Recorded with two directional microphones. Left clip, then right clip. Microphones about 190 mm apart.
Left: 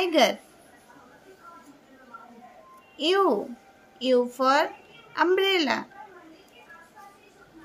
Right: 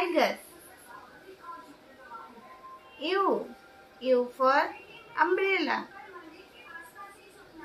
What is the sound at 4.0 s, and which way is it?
Speech, 65° left (ahead or behind).